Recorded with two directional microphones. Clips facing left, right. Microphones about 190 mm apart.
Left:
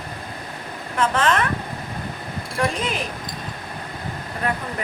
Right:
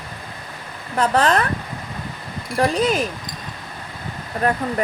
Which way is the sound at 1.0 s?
35° right (ahead or behind).